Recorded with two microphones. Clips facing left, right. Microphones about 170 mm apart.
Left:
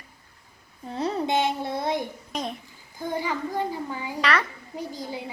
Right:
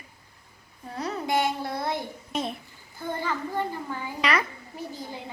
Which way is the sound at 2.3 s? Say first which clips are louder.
Right 2 dB; 5° right (ahead or behind).